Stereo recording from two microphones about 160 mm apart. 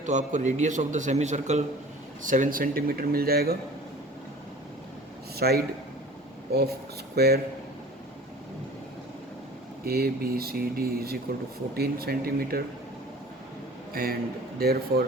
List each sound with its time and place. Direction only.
0.0 s a man's voice: 50° right (ahead or behind); by 3.6 s 75° right (ahead or behind)
5.4 s speech: 75° right (ahead or behind)
9.8 s speech: 75° right (ahead or behind)
13.9 s a man's voice: 65° right (ahead or behind)
14.6 s speech: 75° right (ahead or behind)